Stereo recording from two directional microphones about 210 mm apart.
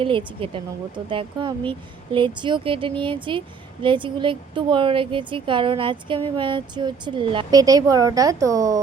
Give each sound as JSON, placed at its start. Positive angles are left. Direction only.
{"t": 0.0, "sound": "speech", "side_deg": -25}